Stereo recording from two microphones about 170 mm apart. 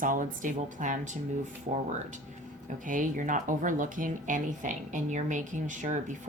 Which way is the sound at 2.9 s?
50° right (ahead or behind).